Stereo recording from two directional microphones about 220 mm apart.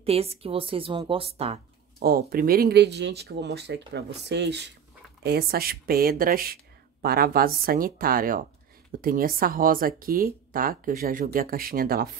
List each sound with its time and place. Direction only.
0.0 s a woman's voice: 25° right (ahead or behind)
2.0 s speech: 45° right (ahead or behind)